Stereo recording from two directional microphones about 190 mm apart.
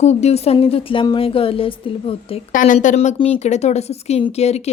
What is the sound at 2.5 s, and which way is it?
Speech, 45° left (ahead or behind).